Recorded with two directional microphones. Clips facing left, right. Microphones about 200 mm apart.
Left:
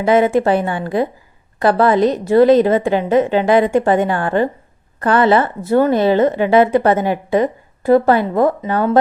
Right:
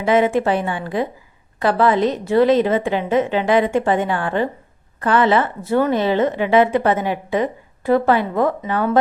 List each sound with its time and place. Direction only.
0.0 s a woman's voice: 40° left (ahead or behind)